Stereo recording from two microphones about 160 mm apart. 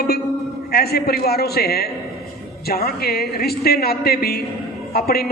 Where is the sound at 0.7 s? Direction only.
80° left.